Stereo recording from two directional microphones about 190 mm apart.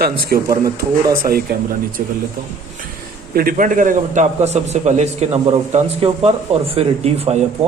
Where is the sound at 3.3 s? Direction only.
50° right (ahead or behind).